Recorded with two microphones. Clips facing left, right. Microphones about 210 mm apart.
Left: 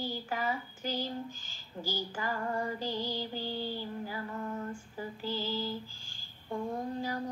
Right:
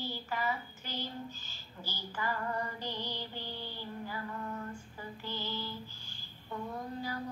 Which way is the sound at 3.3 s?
35° left (ahead or behind).